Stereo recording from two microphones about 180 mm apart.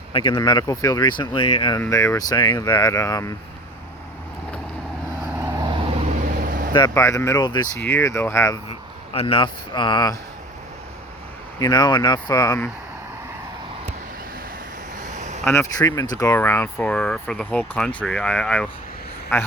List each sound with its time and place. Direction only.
0.1 s speech: 25° left (ahead or behind)
1.8 s speech: 15° left (ahead or behind)
5.4 s vehicle: 20° right (ahead or behind)
6.4 s vehicle: 50° right (ahead or behind)
6.7 s speech: 20° left (ahead or behind)
7.8 s speech: 10° left (ahead or behind)
9.1 s speech: 30° left (ahead or behind)
11.6 s speech: 25° left (ahead or behind)
15.0 s a sound: 40° right (ahead or behind)
15.8 s speech: 20° left (ahead or behind)